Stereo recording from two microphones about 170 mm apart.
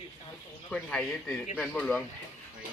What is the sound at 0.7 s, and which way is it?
Speech, 5° left (ahead or behind).